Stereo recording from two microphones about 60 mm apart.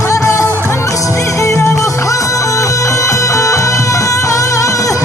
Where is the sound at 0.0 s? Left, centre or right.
Left.